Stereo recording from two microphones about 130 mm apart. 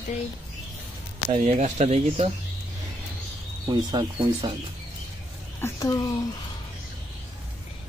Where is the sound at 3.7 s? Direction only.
35° right (ahead or behind).